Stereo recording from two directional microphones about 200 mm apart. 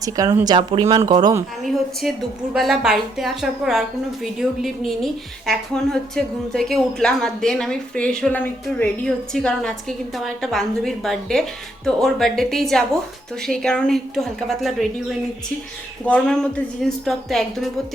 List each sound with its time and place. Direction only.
0.0 s speech: 15° right (ahead or behind)
1.6 s a woman's voice: centre (ahead or behind)
16.0 s a woman's voice: 5° left (ahead or behind)